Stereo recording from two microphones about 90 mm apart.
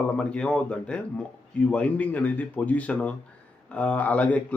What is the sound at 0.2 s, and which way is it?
Speech, 10° left (ahead or behind).